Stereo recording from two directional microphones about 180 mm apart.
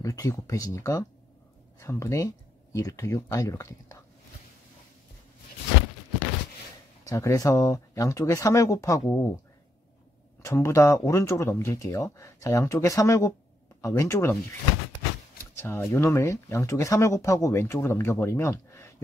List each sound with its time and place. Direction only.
0.0 s speech: 15° left (ahead or behind)
7.1 s speech: 20° left (ahead or behind)
10.4 s speech: 15° left (ahead or behind)
15.5 s speech: 10° left (ahead or behind)